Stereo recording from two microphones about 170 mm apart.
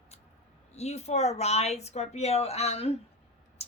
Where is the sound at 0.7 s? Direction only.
40° left (ahead or behind).